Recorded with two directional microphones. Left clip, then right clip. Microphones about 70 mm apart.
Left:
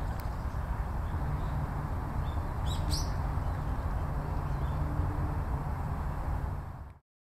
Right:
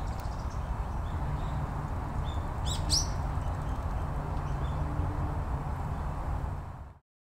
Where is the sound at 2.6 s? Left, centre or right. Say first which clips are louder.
Right 8 dB; right.